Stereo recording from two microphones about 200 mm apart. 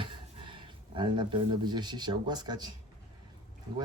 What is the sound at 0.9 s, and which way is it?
Speech, 25° right (ahead or behind).